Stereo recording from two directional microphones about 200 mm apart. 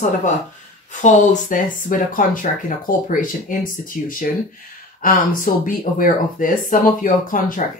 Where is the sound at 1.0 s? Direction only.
35° left (ahead or behind).